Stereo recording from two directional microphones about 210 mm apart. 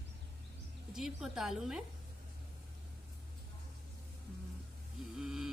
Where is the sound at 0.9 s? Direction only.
Centre (ahead or behind).